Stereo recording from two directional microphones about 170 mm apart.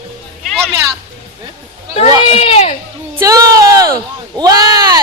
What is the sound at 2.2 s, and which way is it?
Speech, 35° left (ahead or behind).